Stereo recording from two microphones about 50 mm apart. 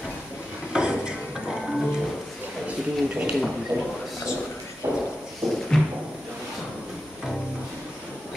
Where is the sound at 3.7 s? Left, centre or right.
Centre.